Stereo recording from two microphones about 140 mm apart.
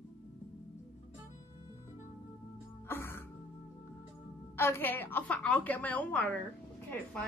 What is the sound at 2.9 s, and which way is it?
Music, 15° left (ahead or behind).